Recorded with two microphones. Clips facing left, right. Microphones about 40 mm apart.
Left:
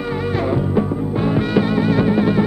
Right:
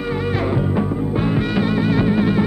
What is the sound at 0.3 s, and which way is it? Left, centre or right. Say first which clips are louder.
Music: left 3 dB; centre.